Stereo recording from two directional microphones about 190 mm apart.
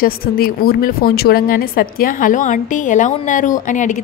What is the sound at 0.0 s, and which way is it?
Speech, 50° left (ahead or behind).